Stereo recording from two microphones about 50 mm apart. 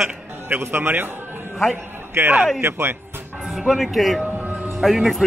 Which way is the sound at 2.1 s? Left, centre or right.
Right.